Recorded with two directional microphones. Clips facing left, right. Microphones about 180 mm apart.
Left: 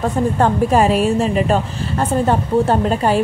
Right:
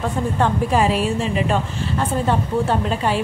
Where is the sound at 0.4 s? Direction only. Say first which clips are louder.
Left 3 dB; 45° left (ahead or behind).